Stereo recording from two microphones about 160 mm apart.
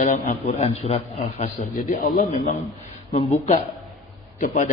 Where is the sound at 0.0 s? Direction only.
50° left (ahead or behind).